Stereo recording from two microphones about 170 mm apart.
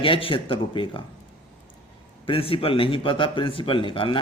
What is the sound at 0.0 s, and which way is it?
A man's voice, 30° left (ahead or behind).